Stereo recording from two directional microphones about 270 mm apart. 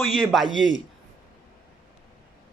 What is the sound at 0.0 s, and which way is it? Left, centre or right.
Speech, centre.